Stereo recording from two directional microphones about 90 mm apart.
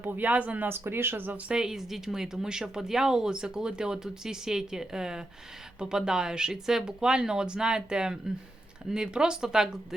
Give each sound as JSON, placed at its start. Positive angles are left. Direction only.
{"t": 0.0, "sound": "speech", "side_deg": -20}
{"t": 1.5, "sound": "speech", "side_deg": -10}